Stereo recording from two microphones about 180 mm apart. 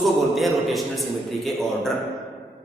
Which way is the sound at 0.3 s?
Centre (ahead or behind).